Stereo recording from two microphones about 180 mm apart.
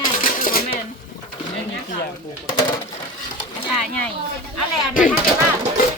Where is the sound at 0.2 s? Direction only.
50° left (ahead or behind).